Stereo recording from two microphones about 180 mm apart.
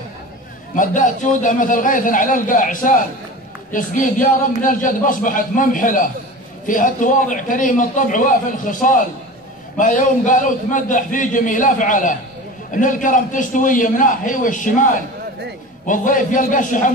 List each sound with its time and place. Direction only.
0.7 s a man's voice: 45° left (ahead or behind)
15.9 s a man's voice: 45° left (ahead or behind)